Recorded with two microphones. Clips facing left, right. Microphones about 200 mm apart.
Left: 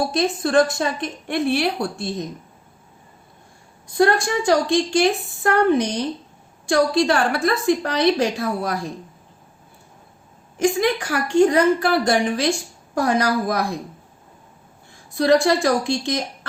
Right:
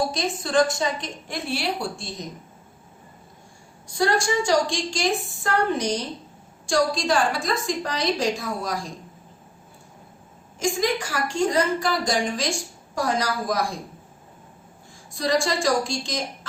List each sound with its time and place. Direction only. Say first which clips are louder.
0.1 s a woman's voice: left 5 dB; 60° left (ahead or behind)
3.8 s a woman's voice: left 4 dB; 60° left (ahead or behind)
10.6 s a woman's voice: left 5 dB; 60° left (ahead or behind)
15.1 s a woman's voice: left 7 dB; 60° left (ahead or behind)